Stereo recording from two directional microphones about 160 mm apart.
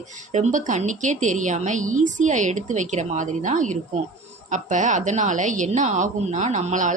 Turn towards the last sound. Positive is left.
turn(degrees=-50)  # may be behind; listen again after turning